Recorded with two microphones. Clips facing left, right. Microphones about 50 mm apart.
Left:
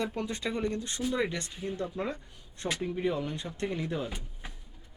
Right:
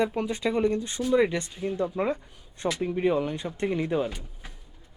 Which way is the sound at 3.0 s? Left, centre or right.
Right.